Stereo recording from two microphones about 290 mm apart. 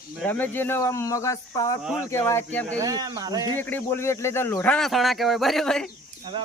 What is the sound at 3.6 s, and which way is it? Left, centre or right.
Speech, centre.